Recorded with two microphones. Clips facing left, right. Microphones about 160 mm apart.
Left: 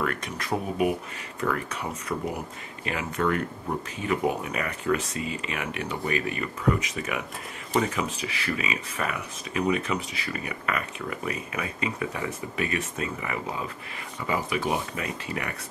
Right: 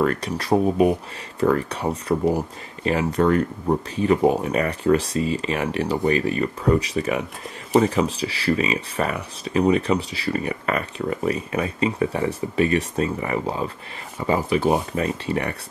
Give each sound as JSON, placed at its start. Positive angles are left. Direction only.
{"t": 0.0, "sound": "speech", "side_deg": -35}